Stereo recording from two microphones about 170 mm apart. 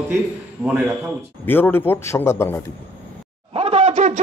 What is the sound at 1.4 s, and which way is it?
A man's voice, 10° left (ahead or behind).